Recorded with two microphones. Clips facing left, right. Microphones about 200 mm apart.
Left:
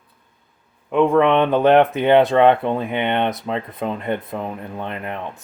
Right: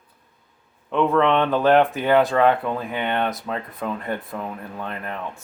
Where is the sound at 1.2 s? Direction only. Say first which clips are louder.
Left 2 dB; 15° left (ahead or behind).